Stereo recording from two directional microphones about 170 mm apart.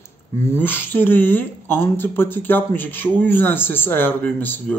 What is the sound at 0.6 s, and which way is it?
A man's voice, 10° left (ahead or behind).